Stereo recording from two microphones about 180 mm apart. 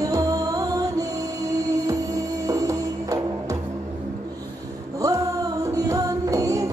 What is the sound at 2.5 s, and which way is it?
Music, 20° right (ahead or behind).